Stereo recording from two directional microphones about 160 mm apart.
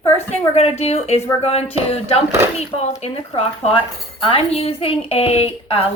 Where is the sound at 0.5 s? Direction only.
40° left (ahead or behind).